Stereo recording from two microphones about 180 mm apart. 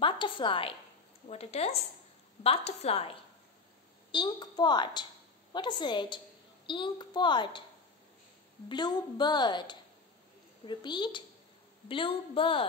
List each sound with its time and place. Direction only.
0.0 s a woman's voice: 25° left (ahead or behind)
8.6 s a woman's voice: 25° left (ahead or behind)